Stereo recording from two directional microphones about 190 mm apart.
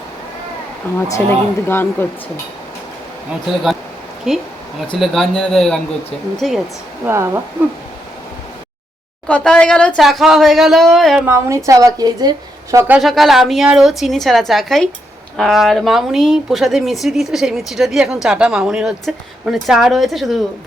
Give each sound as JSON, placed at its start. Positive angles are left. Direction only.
{"t": 1.1, "sound": "speech", "side_deg": 10}
{"t": 4.3, "sound": "speech", "side_deg": 0}
{"t": 7.0, "sound": "a woman's voice", "side_deg": -15}
{"t": 9.2, "sound": "speech", "side_deg": 5}
{"t": 11.3, "sound": "a woman's voice", "side_deg": -15}
{"t": 12.9, "sound": "speech", "side_deg": 0}